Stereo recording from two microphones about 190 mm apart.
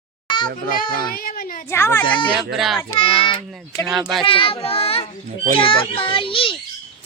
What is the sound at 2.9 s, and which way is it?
Speech, 30° left (ahead or behind).